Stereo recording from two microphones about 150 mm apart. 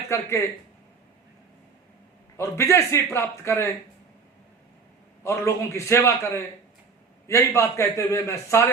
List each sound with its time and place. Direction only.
0.1 s a man's voice: 15° left (ahead or behind)
2.4 s a man's voice: 20° left (ahead or behind)
5.2 s a man's voice: 20° left (ahead or behind)